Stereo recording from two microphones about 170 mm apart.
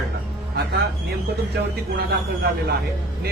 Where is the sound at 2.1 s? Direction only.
70° right (ahead or behind).